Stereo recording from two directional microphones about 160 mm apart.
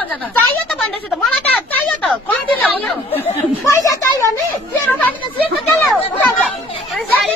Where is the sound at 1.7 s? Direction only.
10° left (ahead or behind).